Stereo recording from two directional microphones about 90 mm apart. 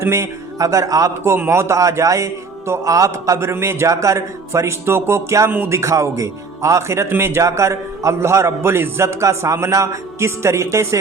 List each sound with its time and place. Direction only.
0.0 s speech: 30° right (ahead or behind)
1.2 s a man's voice: 25° right (ahead or behind)